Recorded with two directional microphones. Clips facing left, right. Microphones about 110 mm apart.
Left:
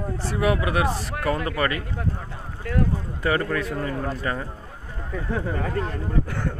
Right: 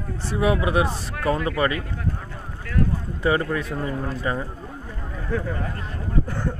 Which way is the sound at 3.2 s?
20° right (ahead or behind).